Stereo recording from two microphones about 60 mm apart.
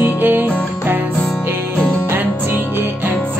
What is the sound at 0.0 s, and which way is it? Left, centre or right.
Music, right.